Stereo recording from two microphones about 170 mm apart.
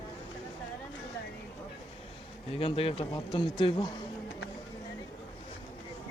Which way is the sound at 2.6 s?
35° left (ahead or behind).